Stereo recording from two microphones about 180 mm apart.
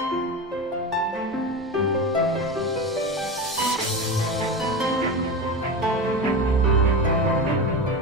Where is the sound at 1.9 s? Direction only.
Centre (ahead or behind).